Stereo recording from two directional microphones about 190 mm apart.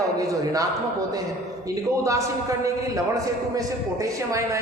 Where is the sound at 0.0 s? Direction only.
20° right (ahead or behind).